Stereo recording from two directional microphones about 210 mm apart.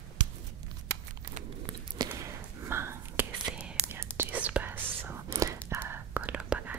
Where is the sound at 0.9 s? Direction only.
50° right (ahead or behind).